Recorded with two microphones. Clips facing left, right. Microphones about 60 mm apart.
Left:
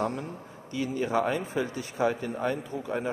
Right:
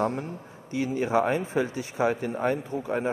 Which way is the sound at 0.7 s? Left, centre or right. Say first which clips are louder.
Right 3 dB; right.